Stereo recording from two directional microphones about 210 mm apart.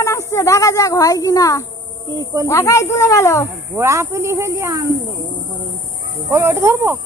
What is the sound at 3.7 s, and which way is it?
Speech, 15° right (ahead or behind).